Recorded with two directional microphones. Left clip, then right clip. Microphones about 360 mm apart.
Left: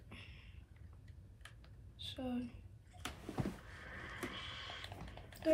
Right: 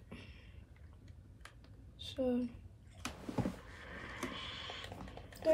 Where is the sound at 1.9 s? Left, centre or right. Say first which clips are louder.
Right 7 dB; right.